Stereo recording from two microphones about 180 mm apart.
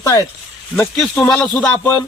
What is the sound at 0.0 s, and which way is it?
Speech, 20° left (ahead or behind).